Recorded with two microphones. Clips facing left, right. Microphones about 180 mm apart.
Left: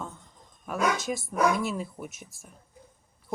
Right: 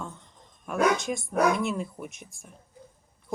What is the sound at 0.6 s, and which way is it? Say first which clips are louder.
Speech: right 3 dB; 5° left (ahead or behind).